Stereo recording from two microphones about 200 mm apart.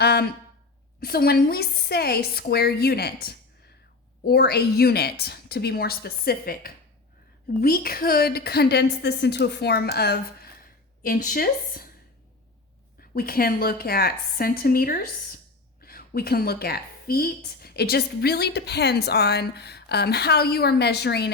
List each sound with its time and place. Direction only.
0.0 s a sound: 55° left (ahead or behind)
0.9 s a woman's voice: 50° left (ahead or behind)
13.0 s a woman's voice: 50° left (ahead or behind)